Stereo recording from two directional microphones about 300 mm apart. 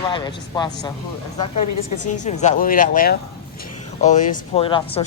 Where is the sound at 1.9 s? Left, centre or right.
Left.